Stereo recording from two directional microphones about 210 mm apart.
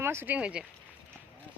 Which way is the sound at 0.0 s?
10° right (ahead or behind).